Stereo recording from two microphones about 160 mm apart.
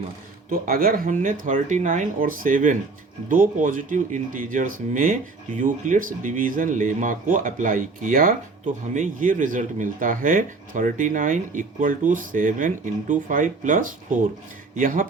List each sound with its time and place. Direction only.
0.6 s speech: 65° right (ahead or behind)